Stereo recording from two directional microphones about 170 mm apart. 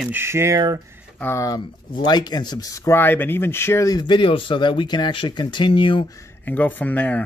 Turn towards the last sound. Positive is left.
turn(degrees=10)  # may be behind; listen again after turning